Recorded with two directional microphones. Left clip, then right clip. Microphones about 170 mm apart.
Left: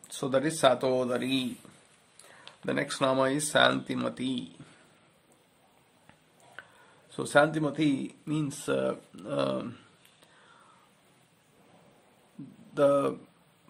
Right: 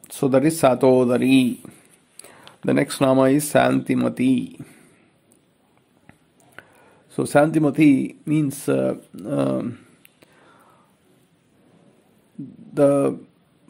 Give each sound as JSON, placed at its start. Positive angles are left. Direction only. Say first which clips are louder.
{"t": 0.1, "sound": "speech", "louder": "right 10 dB", "side_deg": -30}
{"t": 2.2, "sound": "a sound", "louder": "right 8 dB", "side_deg": -35}
{"t": 2.6, "sound": "speech", "louder": "right 9 dB", "side_deg": -35}
{"t": 4.6, "sound": "a sound", "louder": "right 10 dB", "side_deg": -20}
{"t": 7.2, "sound": "speech", "louder": "right 7 dB", "side_deg": -25}
{"t": 12.7, "sound": "speech", "louder": "right 7 dB", "side_deg": -20}